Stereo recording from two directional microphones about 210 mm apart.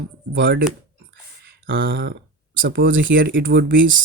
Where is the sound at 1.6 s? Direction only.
60° right (ahead or behind).